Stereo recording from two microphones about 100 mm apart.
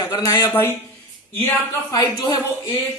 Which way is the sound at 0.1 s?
40° left (ahead or behind).